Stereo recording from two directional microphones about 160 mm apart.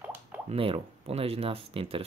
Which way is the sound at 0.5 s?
35° right (ahead or behind).